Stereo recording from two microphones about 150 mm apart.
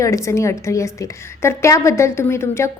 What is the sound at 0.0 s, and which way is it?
A woman's voice, 20° left (ahead or behind).